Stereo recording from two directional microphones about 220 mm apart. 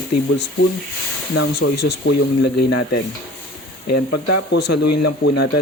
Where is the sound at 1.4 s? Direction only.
55° left (ahead or behind).